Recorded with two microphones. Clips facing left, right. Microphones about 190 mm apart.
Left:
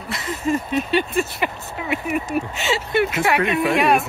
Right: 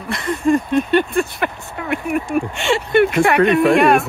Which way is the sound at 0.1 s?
55° right (ahead or behind).